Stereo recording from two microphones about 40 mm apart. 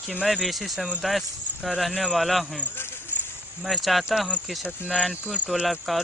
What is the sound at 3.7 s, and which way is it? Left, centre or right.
Speech, centre.